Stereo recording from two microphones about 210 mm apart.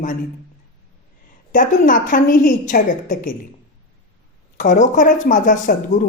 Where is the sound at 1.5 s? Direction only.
40° left (ahead or behind).